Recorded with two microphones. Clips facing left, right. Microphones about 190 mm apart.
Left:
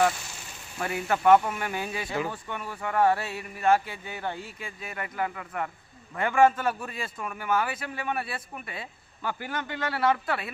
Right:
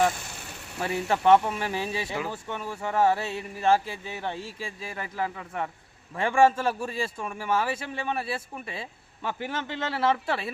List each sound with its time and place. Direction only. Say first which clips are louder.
0.1 s vehicle: right 2 dB; 60° right (ahead or behind)
0.8 s a man's voice: right 1 dB; 25° right (ahead or behind)